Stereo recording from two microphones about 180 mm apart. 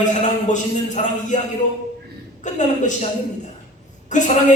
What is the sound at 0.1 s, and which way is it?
A man's voice, 40° left (ahead or behind).